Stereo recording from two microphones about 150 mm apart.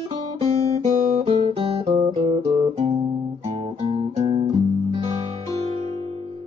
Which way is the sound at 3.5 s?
40° right (ahead or behind).